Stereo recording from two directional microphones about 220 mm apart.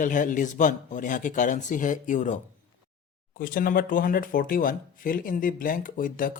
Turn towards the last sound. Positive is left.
turn(degrees=40)  # may be behind; listen again after turning